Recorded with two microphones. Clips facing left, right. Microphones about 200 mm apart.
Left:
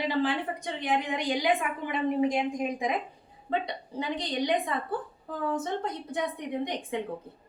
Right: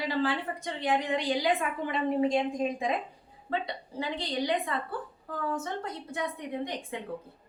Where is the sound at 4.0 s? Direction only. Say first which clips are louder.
Left 1 dB; 20° left (ahead or behind).